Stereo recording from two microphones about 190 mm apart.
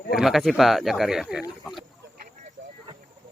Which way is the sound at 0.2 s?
Centre (ahead or behind).